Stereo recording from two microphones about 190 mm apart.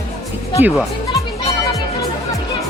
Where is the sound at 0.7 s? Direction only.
5° right (ahead or behind).